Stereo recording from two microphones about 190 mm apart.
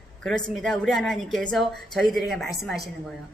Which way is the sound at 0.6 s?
Centre (ahead or behind).